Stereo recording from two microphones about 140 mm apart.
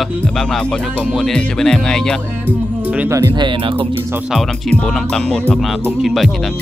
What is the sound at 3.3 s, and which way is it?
Speech, 35° right (ahead or behind).